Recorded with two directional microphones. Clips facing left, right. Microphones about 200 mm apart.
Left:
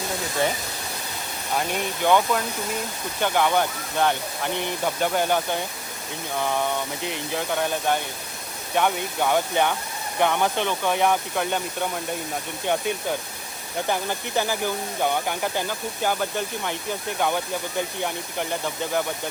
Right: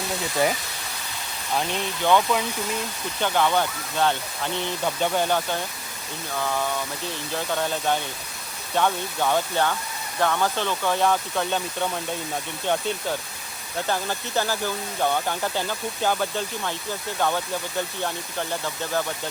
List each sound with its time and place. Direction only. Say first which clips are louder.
1.5 s speech: even; 10° left (ahead or behind)